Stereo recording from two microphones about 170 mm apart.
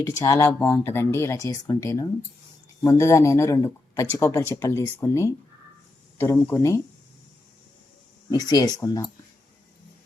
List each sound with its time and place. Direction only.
0.2 s speech: 20° left (ahead or behind)
8.3 s speech: 20° left (ahead or behind)